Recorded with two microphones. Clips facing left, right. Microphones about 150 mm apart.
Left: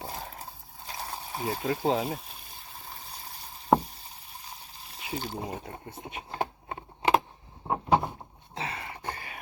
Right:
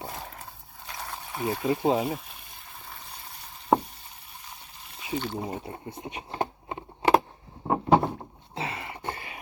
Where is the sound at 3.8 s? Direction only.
35° left (ahead or behind).